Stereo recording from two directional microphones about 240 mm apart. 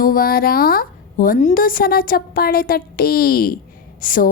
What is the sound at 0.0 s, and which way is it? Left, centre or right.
A woman's voice, left.